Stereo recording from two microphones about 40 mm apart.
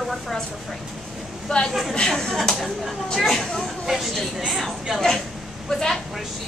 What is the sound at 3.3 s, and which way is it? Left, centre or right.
Speech, centre.